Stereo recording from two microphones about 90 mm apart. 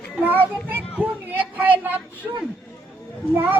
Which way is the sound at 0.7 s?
20° right (ahead or behind).